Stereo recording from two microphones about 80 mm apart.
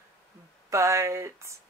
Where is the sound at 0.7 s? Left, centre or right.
Right.